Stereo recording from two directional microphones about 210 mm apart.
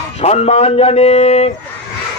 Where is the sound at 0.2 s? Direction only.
30° left (ahead or behind).